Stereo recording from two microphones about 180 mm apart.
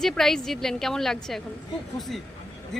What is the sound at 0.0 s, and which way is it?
A woman's voice, centre (ahead or behind).